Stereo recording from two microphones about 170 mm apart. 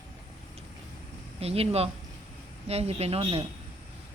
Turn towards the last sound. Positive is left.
turn(degrees=-35)  # may be behind; listen again after turning